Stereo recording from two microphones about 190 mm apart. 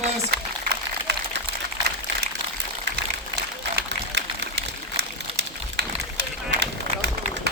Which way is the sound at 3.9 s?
65° right (ahead or behind).